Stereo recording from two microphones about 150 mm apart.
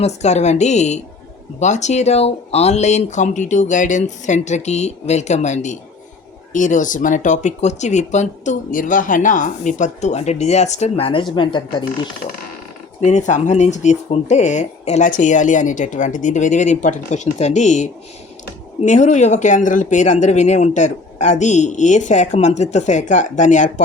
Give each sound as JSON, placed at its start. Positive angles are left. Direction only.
{"t": 0.0, "sound": "speech", "side_deg": 50}
{"t": 13.0, "sound": "speech", "side_deg": 50}